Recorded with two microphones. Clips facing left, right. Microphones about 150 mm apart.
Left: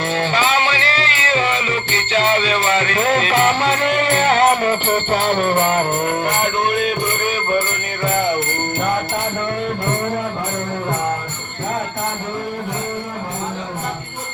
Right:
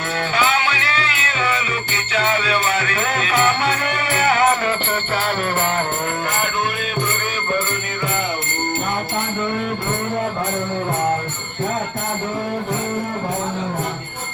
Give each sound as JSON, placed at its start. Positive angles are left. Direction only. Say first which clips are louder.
{"t": 0.3, "sound": "music", "louder": "even", "side_deg": 30}